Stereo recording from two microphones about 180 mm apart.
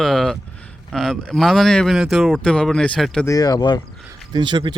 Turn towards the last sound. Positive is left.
turn(degrees=-25)  # may be behind; listen again after turning